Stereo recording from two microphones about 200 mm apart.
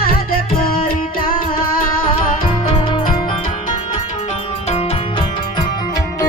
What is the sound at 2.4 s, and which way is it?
Music, 25° left (ahead or behind).